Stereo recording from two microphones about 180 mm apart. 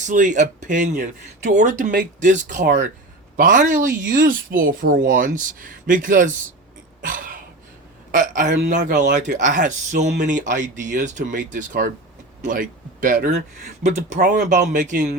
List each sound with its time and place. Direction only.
0.0 s speech: 45° right (ahead or behind)
7.0 s a sound: 50° right (ahead or behind)
8.1 s speech: 45° right (ahead or behind)